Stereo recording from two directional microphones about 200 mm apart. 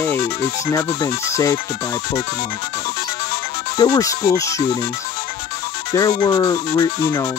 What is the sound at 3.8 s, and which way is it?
Speech, 15° left (ahead or behind).